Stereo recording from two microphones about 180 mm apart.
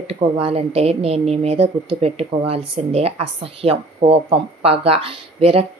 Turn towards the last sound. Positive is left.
turn(degrees=-30)  # may be behind; listen again after turning